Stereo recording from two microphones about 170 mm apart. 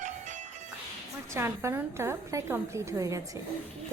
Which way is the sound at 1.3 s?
15° right (ahead or behind).